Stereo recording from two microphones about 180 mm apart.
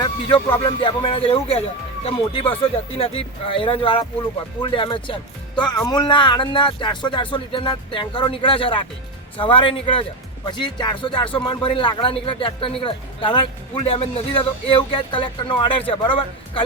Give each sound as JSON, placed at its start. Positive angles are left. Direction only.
{"t": 0.6, "sound": "a man's voice", "side_deg": 30}